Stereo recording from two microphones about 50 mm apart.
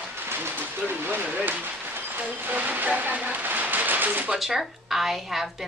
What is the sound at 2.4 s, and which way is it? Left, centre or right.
Speech, right.